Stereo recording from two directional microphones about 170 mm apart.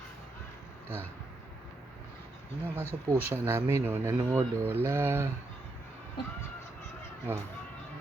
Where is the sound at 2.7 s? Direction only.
15° right (ahead or behind).